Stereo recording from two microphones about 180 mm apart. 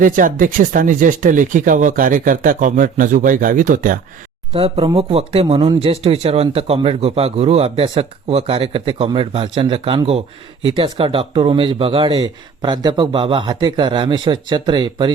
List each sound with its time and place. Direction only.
0.0 s speech: 50° right (ahead or behind)
4.5 s speech: 30° right (ahead or behind)